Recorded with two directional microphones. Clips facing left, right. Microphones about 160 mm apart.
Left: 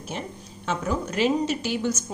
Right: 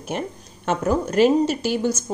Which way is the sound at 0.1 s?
55° right (ahead or behind).